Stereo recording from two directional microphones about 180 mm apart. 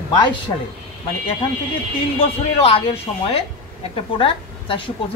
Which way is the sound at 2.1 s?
35° left (ahead or behind).